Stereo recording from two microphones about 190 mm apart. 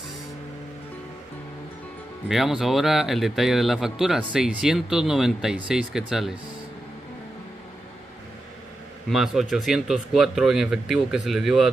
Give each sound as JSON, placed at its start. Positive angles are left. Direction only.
{"t": 2.2, "sound": "speech", "side_deg": 0}
{"t": 9.1, "sound": "speech", "side_deg": 0}